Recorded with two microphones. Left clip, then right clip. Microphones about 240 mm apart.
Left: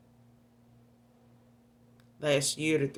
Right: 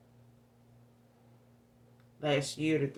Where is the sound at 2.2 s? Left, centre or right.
Left.